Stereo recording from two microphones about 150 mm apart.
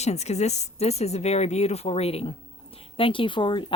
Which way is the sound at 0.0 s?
45° left (ahead or behind).